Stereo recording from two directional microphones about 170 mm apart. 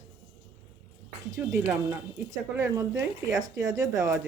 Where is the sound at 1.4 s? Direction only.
10° right (ahead or behind).